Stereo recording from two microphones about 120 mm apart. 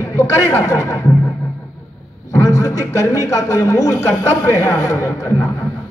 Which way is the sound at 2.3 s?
25° left (ahead or behind).